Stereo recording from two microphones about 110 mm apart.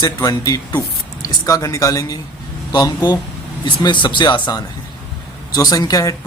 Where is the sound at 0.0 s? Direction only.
35° left (ahead or behind).